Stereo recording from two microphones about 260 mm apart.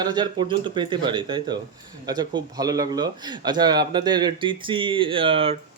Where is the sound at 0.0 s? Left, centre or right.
Centre.